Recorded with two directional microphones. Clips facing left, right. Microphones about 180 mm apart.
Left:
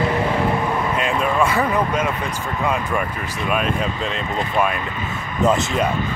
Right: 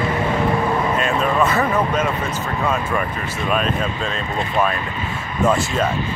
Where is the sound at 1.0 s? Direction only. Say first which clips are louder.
Left 1 dB; 10° left (ahead or behind).